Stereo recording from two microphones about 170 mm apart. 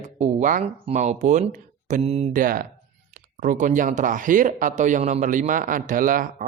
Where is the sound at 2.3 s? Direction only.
55° right (ahead or behind).